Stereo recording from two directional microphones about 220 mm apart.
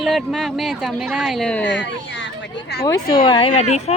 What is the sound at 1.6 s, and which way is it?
Speech, 50° left (ahead or behind).